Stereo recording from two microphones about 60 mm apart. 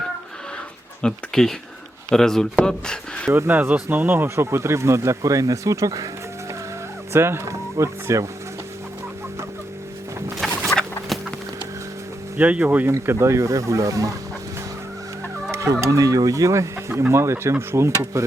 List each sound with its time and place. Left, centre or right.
1.0 s speech: centre
3.3 s speech: right
7.1 s speech: right
10.4 s a sound: centre
12.4 s speech: right
13.1 s speech: right
15.5 s speech: right
17.9 s speech: right